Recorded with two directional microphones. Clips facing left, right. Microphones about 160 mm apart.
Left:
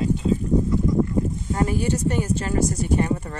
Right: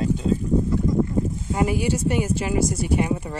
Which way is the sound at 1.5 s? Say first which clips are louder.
Right 1 dB; 10° right (ahead or behind).